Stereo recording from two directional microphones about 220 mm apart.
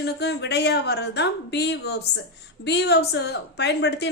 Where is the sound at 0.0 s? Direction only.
50° left (ahead or behind).